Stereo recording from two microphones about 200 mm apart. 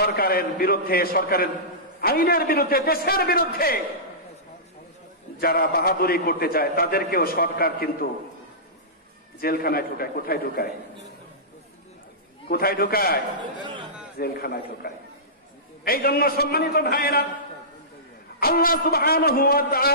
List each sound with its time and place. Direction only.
0.0 s a man's voice: 50° left (ahead or behind)
5.4 s a man's voice: 50° left (ahead or behind)
9.4 s a man's voice: 50° left (ahead or behind)
12.4 s a man's voice: 50° left (ahead or behind)
13.4 s speech: 20° right (ahead or behind)
14.1 s a man's voice: 50° left (ahead or behind)
18.4 s a man's voice: 45° left (ahead or behind)